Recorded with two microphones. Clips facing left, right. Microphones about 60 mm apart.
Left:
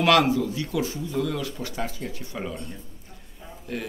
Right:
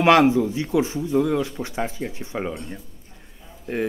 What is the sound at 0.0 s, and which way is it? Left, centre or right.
A man's voice, right.